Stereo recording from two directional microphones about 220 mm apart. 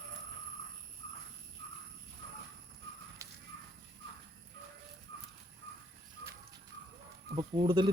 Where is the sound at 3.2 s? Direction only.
15° right (ahead or behind).